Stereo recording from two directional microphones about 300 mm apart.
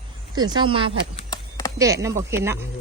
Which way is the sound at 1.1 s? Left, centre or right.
Centre.